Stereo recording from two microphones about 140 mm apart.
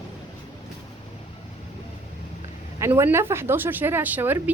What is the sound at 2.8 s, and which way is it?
Speech, 20° right (ahead or behind).